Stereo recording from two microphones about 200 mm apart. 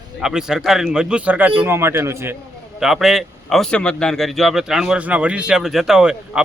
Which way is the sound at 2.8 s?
Centre (ahead or behind).